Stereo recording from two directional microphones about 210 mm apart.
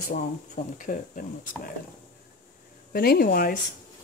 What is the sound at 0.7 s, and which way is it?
Speech, 40° left (ahead or behind).